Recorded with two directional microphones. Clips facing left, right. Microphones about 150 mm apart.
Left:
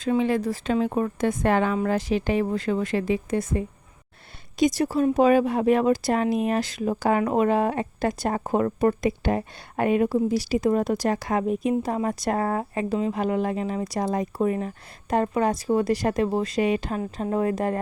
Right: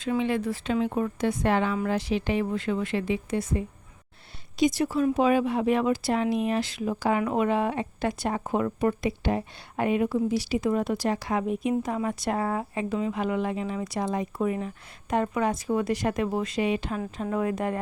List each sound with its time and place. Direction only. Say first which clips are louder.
0.2 s speech: left 3 dB; 40° left (ahead or behind)
4.6 s speech: left 2 dB; 40° left (ahead or behind)